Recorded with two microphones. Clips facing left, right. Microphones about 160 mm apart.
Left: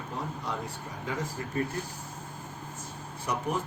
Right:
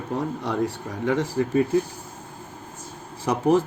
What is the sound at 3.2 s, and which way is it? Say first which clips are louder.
Speech: right 11 dB; 90° right.